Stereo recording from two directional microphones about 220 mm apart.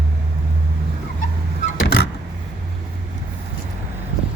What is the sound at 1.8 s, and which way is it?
Vehicle, 45° left (ahead or behind).